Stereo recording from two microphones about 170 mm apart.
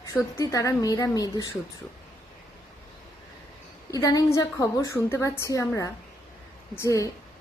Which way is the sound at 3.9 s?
20° left (ahead or behind).